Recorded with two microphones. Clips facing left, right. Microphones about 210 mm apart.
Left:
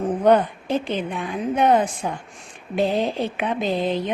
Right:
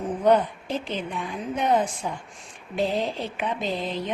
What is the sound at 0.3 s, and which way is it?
Speech, 60° left (ahead or behind).